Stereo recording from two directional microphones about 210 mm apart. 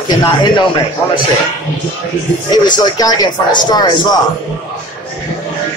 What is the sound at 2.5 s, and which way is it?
Speech, 20° left (ahead or behind).